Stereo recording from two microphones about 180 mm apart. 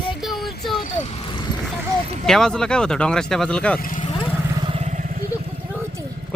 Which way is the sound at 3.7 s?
50° left (ahead or behind).